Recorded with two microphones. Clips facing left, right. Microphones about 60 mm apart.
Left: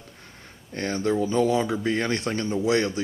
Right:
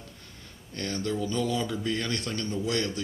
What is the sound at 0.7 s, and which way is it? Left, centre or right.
Speech, left.